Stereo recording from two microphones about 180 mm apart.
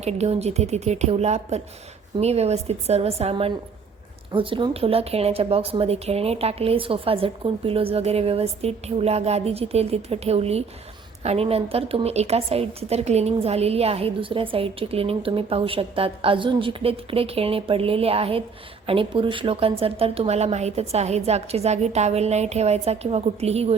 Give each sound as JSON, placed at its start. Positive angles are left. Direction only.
{"t": 0.0, "sound": "a woman's voice", "side_deg": -35}